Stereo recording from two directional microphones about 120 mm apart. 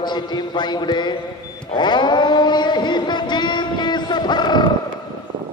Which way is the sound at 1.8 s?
40° left (ahead or behind).